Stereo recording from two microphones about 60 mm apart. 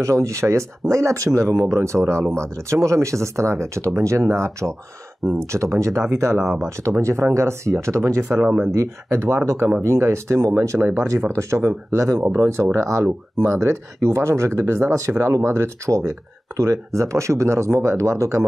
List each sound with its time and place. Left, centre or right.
0.0 s speech: right
8.2 s speech: right